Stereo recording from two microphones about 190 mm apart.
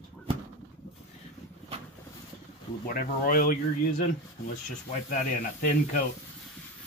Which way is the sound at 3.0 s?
50° left (ahead or behind).